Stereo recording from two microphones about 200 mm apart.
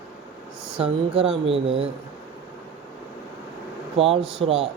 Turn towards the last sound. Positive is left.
turn(degrees=-30)  # may be behind; listen again after turning